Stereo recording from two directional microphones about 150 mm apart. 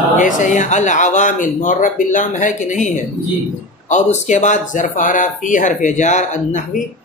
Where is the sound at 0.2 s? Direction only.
55° left (ahead or behind).